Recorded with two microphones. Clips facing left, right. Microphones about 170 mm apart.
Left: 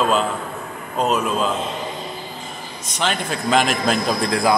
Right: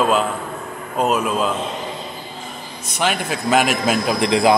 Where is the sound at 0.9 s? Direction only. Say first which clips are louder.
Right 1 dB; 5° right (ahead or behind).